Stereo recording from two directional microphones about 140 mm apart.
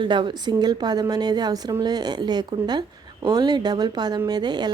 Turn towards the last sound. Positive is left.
turn(degrees=-30)  # may be behind; listen again after turning